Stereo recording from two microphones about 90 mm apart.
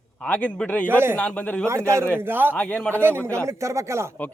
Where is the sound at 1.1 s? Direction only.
15° left (ahead or behind).